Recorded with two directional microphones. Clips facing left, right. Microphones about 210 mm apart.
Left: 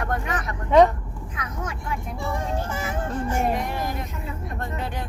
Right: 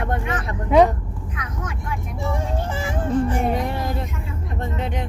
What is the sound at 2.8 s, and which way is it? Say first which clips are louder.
Speech: right 6 dB; 30° right (ahead or behind).